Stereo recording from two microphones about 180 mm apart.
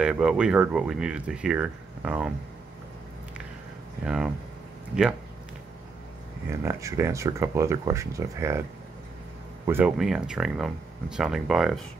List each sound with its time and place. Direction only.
0.0 s speech: 5° right (ahead or behind)
4.0 s speech: 5° right (ahead or behind)
6.5 s speech: 15° right (ahead or behind)
9.7 s speech: 10° right (ahead or behind)